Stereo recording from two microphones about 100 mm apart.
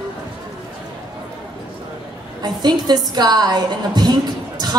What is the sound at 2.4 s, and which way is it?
A woman's voice, 45° right (ahead or behind).